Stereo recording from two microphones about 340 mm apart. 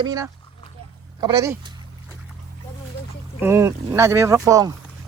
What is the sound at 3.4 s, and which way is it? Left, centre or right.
Speech, centre.